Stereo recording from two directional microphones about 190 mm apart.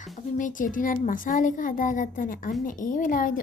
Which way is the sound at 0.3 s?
45° left (ahead or behind).